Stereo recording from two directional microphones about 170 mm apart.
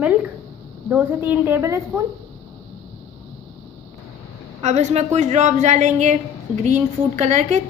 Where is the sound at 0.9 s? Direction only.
10° right (ahead or behind).